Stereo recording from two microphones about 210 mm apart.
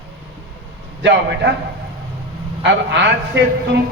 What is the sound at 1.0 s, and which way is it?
Speech, 55° right (ahead or behind).